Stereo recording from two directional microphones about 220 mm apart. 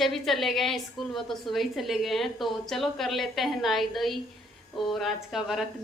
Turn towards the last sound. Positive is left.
turn(degrees=0)  # may be behind; listen again after turning